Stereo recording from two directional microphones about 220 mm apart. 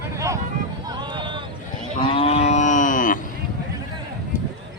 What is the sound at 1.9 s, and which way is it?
Moo, 25° left (ahead or behind).